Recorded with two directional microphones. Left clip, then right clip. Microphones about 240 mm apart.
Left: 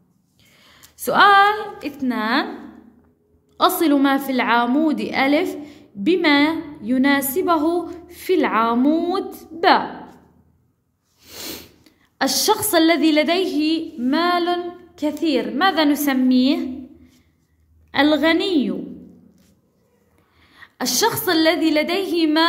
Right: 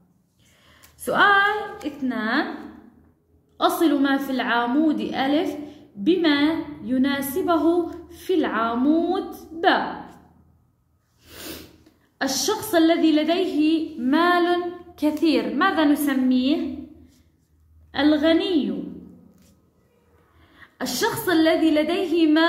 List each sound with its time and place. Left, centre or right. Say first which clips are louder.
0.5 s a sound: left 4 dB; left
3.5 s a woman's voice: left 3 dB; left
11.2 s sneeze: left 5 dB; left
12.2 s a woman's voice: left 6 dB; left
17.9 s a woman's voice: left 3 dB; left
20.5 s a woman's voice: left 6 dB; left